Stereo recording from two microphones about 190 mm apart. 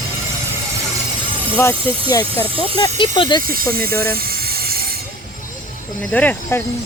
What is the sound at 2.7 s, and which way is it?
Speech, 25° left (ahead or behind).